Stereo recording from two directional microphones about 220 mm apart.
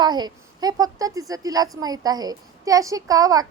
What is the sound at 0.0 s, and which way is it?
A woman's voice, 20° right (ahead or behind).